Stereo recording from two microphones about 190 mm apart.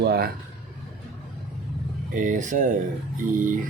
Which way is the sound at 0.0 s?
55° right (ahead or behind).